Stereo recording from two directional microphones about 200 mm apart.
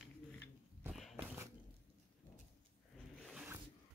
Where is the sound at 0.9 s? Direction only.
Centre (ahead or behind).